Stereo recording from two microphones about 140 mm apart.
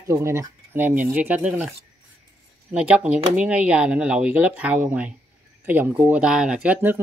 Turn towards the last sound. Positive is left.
turn(degrees=-10)  # may be behind; listen again after turning